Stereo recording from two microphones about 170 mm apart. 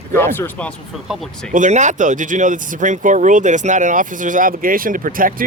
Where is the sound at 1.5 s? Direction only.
45° right (ahead or behind).